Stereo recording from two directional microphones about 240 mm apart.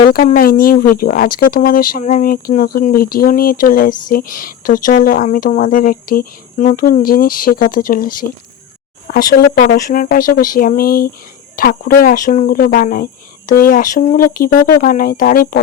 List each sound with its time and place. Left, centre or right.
0.1 s speech: left